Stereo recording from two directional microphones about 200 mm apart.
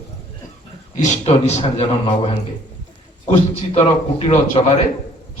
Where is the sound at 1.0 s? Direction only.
35° left (ahead or behind).